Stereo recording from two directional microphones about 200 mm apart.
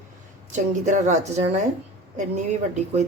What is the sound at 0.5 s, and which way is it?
A woman's voice, 40° right (ahead or behind).